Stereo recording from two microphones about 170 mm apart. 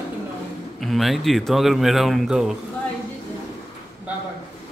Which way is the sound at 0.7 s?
Centre (ahead or behind).